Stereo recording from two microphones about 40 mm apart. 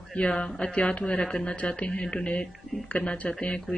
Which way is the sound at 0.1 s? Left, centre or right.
Left.